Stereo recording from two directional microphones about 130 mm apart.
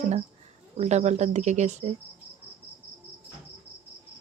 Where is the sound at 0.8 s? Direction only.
60° right (ahead or behind).